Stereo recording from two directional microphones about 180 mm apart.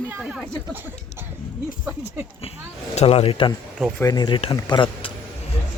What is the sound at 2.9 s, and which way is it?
Speech, 35° left (ahead or behind).